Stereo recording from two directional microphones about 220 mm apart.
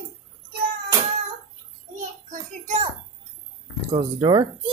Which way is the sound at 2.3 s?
30° right (ahead or behind).